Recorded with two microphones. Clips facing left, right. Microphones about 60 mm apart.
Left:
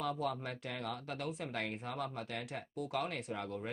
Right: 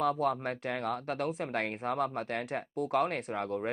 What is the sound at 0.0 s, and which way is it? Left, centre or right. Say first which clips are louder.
Speech: right 8 dB; right.